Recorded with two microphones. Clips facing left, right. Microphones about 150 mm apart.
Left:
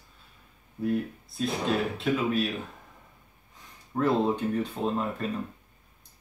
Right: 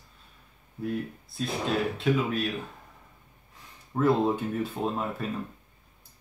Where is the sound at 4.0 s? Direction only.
5° right (ahead or behind).